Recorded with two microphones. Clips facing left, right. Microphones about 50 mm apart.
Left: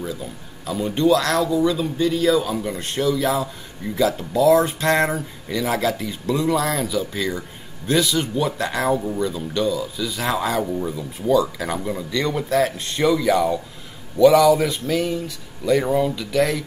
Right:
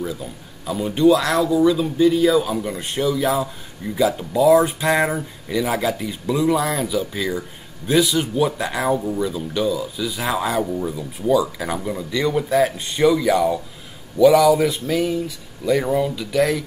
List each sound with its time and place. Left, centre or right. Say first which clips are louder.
0.0 s speech: right 2 dB; centre